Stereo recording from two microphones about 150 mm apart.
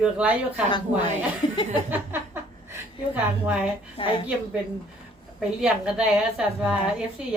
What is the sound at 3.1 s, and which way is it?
Speech, 10° right (ahead or behind).